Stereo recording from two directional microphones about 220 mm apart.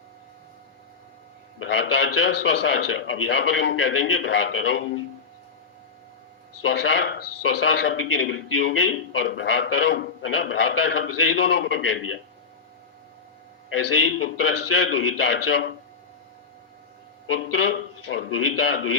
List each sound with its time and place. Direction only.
1.5 s a man's voice: 60° left (ahead or behind)
6.6 s a man's voice: 55° left (ahead or behind)
13.7 s a man's voice: 70° left (ahead or behind)
17.7 s a man's voice: 60° left (ahead or behind)